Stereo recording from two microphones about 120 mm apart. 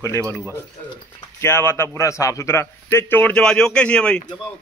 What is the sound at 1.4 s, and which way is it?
A man's voice, 20° left (ahead or behind).